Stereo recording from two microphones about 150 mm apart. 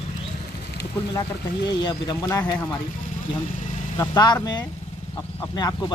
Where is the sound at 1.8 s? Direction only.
30° left (ahead or behind).